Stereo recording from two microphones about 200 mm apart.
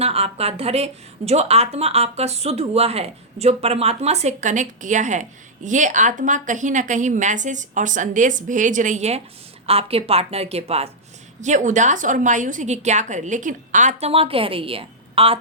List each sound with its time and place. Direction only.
0.0 s a woman's voice: 30° right (ahead or behind)